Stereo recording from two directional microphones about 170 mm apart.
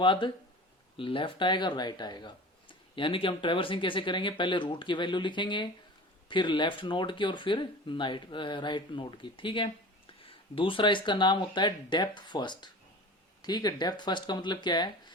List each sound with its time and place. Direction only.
0.0 s speech: 30° left (ahead or behind)